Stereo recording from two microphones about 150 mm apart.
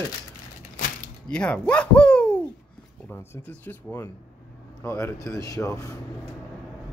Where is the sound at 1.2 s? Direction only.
5° left (ahead or behind).